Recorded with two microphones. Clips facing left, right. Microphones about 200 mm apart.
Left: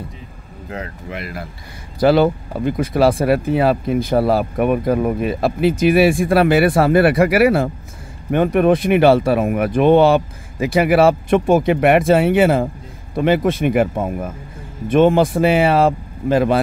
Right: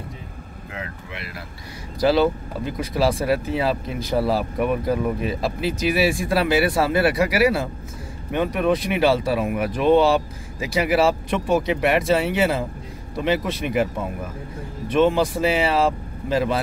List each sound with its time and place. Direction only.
0.7 s speech: 45° left (ahead or behind)
2.0 s speech: 55° left (ahead or behind)